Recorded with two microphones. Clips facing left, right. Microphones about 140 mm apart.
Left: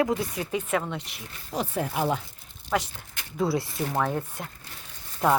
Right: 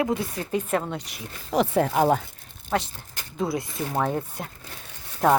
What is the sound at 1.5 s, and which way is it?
Speech, 65° right (ahead or behind).